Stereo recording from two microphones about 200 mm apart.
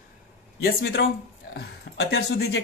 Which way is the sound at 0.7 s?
55° left (ahead or behind).